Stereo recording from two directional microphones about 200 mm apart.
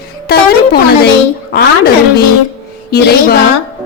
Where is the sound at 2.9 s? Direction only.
50° left (ahead or behind).